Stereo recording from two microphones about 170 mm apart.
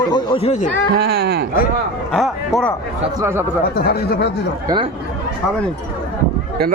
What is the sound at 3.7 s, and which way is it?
Speech, 65° left (ahead or behind).